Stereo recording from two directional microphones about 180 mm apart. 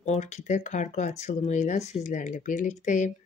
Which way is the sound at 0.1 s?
40° left (ahead or behind).